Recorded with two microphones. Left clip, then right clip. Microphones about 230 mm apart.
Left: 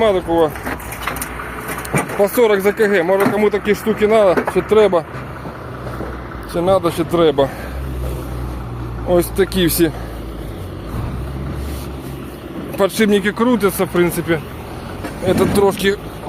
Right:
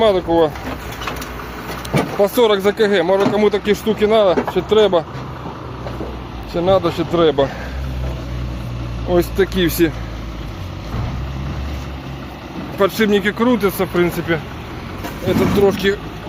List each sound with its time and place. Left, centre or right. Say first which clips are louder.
0.0 s speech: even; centre
2.0 s speech: even; centre
6.5 s speech: even; centre
9.0 s speech: left 1 dB; centre
12.8 s speech: even; centre
15.3 s speech: left 1 dB; left